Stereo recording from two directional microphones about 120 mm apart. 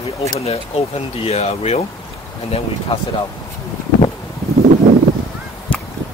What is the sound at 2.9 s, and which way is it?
Speech, 50° left (ahead or behind).